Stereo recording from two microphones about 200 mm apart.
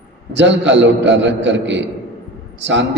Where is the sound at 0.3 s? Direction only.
65° right (ahead or behind).